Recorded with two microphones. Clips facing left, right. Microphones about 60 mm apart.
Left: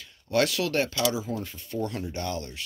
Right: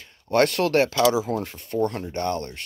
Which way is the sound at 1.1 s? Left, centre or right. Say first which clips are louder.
Right 7 dB; right.